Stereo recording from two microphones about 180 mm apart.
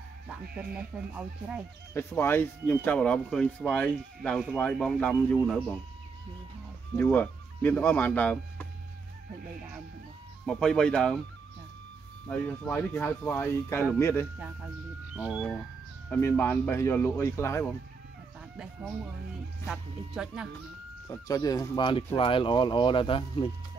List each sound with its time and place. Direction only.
0.9 s speech: 10° right (ahead or behind)
2.0 s speech: 10° left (ahead or behind)
7.0 s speech: 10° left (ahead or behind)
10.4 s speech: 5° left (ahead or behind)
12.3 s speech: 10° left (ahead or behind)
15.1 s speech: 5° right (ahead or behind)
16.1 s speech: 10° left (ahead or behind)
19.7 s speech: 5° right (ahead or behind)
21.1 s speech: 20° left (ahead or behind)